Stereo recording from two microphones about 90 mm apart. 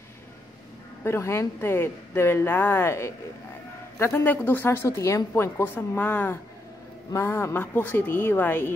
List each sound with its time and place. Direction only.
1.0 s a woman's voice: 30° left (ahead or behind)